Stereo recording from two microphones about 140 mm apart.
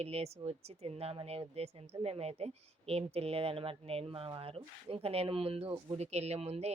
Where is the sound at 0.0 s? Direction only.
50° right (ahead or behind).